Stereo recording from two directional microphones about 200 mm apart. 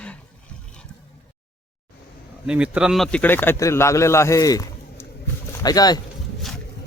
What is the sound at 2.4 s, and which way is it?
Speech, 5° right (ahead or behind).